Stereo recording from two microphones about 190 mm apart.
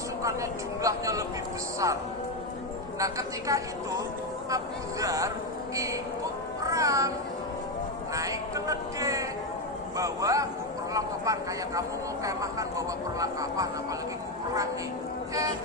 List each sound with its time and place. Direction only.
0.8 s a sound: 15° right (ahead or behind)
3.0 s speech: 15° right (ahead or behind)
6.6 s music: 15° right (ahead or behind)
8.1 s speech: 15° right (ahead or behind)